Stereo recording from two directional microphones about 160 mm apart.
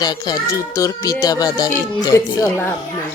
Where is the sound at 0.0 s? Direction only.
20° left (ahead or behind).